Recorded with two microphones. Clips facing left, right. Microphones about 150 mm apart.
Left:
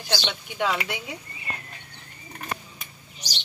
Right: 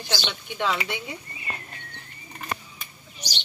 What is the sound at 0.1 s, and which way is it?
Speech, 5° left (ahead or behind).